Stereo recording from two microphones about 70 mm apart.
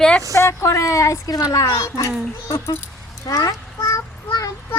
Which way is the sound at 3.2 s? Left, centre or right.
Left.